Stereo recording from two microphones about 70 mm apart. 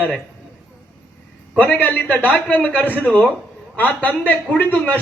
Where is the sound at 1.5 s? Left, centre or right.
Left.